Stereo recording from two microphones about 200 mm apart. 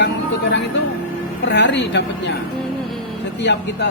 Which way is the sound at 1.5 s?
60° left (ahead or behind).